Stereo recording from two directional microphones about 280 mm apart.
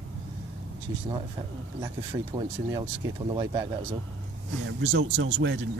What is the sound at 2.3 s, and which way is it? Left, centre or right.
Speech, centre.